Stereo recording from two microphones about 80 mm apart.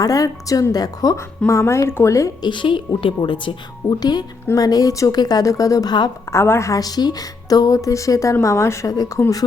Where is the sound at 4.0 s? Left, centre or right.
Left.